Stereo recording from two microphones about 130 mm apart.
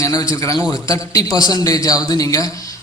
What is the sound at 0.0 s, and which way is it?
A man's voice, 25° left (ahead or behind).